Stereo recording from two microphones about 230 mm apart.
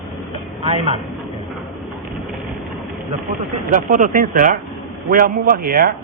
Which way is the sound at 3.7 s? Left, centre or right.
Right.